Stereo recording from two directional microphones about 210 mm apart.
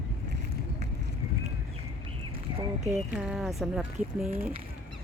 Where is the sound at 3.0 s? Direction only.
Centre (ahead or behind).